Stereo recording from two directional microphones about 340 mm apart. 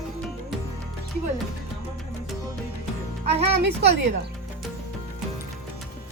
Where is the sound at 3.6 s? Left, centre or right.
Right.